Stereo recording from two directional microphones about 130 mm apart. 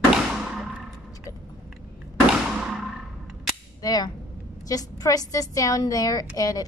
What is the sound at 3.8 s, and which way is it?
A woman's voice, 30° left (ahead or behind).